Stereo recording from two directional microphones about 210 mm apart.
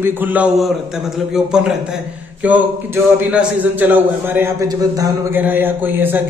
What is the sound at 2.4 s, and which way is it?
A man's voice, 5° right (ahead or behind).